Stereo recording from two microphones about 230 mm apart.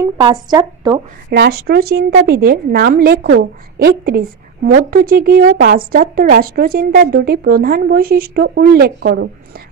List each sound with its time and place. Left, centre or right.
0.0 s speech: centre
1.3 s speech: right